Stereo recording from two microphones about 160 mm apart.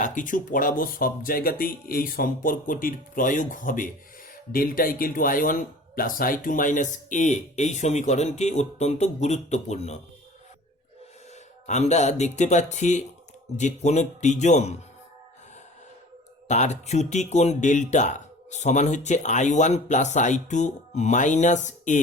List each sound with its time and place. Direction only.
0.0 s speech: 55° left (ahead or behind)
11.6 s speech: 45° left (ahead or behind)
16.5 s speech: 45° left (ahead or behind)